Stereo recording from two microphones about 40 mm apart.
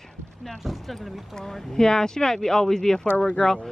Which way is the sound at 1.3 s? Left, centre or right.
Centre.